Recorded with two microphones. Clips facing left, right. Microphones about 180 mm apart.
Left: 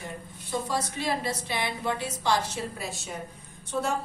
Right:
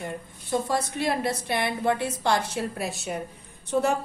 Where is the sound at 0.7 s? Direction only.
55° right (ahead or behind).